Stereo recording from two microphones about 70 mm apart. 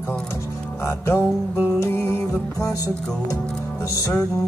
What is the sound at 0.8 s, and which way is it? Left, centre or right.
Music, left.